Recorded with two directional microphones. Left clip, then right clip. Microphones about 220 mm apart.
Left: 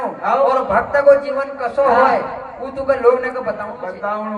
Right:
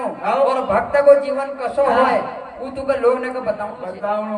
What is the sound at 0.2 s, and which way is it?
A man's voice, 50° right (ahead or behind).